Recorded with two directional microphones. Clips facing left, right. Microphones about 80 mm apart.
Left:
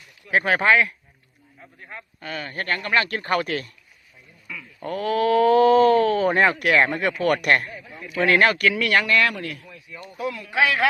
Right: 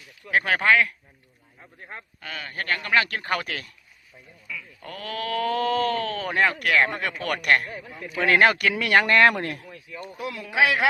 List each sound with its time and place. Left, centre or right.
0.3 s speech: centre
2.3 s speech: centre
4.4 s speech: centre
6.9 s speech: centre
8.3 s speech: centre
9.0 s speech: right
9.3 s speech: right
10.2 s speech: centre